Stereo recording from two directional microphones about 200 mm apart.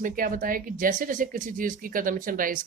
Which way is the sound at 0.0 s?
45° right (ahead or behind).